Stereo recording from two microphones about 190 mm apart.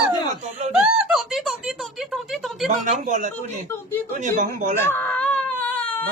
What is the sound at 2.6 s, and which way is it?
Speech, 40° right (ahead or behind).